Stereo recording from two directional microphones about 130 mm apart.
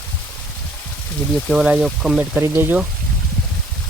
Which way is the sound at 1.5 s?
5° right (ahead or behind).